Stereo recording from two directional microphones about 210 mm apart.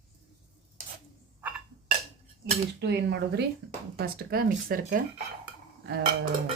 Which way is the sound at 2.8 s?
55° right (ahead or behind).